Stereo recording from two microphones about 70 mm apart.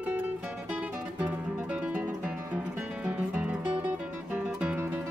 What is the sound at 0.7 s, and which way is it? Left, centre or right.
Music, centre.